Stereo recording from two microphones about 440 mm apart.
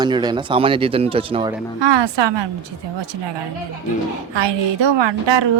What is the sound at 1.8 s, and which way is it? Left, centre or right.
Speech, right.